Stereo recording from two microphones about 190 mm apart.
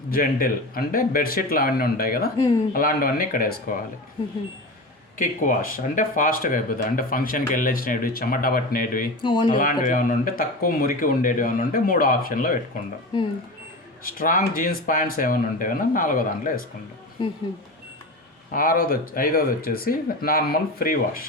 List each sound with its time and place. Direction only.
0.1 s speech: 50° left (ahead or behind)
5.1 s speech: 45° left (ahead or behind)
9.2 s speech: 25° left (ahead or behind)
9.6 s speech: 45° left (ahead or behind)
14.0 s speech: 45° left (ahead or behind)
17.2 s speech: 25° left (ahead or behind)
18.5 s speech: 45° left (ahead or behind)